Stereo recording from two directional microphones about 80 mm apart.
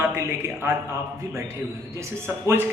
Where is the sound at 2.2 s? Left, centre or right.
Right.